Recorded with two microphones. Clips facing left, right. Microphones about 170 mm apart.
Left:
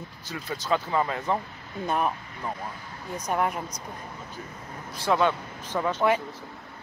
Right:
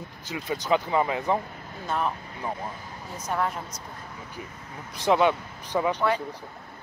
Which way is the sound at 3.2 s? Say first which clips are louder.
Left 2 dB; 20° left (ahead or behind).